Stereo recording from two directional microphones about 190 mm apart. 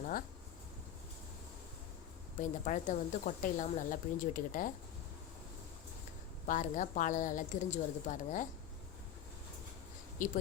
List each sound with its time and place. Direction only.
2.4 s speech: 40° left (ahead or behind)
6.4 s speech: 45° left (ahead or behind)
10.2 s speech: 45° left (ahead or behind)